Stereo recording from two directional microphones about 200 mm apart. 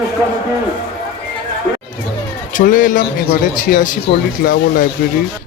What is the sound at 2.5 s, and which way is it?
Speech, 40° left (ahead or behind).